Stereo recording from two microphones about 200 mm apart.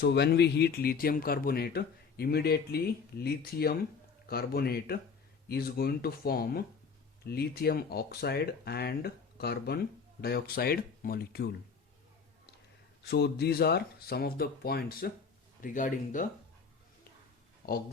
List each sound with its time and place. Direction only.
0.0 s speech: 55° left (ahead or behind)
13.1 s speech: 55° left (ahead or behind)